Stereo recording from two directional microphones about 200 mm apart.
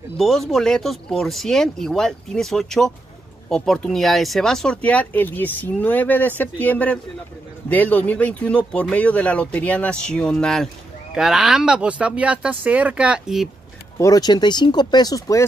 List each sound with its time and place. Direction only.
0.2 s speech: centre (ahead or behind)
13.9 s speech: 15° left (ahead or behind)